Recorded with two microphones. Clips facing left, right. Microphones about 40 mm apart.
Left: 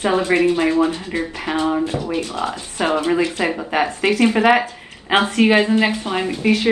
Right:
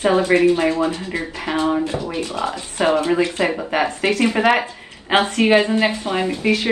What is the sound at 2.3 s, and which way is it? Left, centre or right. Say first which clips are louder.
Speech: right 1 dB; left.